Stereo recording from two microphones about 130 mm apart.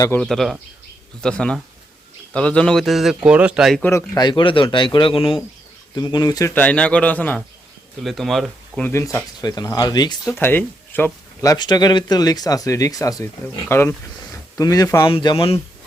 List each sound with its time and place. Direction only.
0.2 s a man's voice: centre (ahead or behind)
4.1 s speech: 35° left (ahead or behind)
5.9 s speech: 35° left (ahead or behind)
6.5 s a man's voice: 10° left (ahead or behind)
8.8 s speech: 20° left (ahead or behind)
10.3 s a man's voice: 15° left (ahead or behind)
15.0 s speech: 35° left (ahead or behind)